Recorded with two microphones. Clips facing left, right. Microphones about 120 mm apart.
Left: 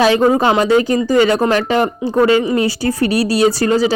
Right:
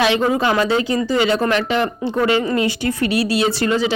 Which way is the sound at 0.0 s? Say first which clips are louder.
Left 5 dB; 40° left (ahead or behind).